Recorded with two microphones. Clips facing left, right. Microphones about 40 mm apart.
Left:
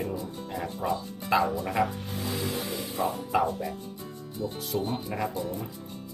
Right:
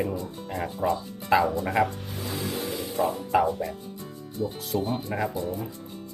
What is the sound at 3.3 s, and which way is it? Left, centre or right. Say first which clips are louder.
Speech: right 3 dB; centre.